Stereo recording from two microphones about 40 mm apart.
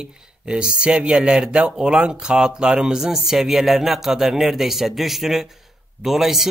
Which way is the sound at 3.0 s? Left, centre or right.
Centre.